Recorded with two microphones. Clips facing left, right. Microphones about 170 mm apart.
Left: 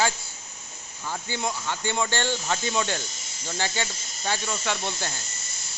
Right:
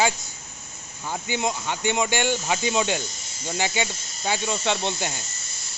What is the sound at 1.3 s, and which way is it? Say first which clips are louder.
Speech: right 4 dB; 15° right (ahead or behind).